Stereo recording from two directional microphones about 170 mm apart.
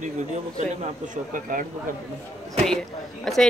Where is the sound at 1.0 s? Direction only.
50° right (ahead or behind).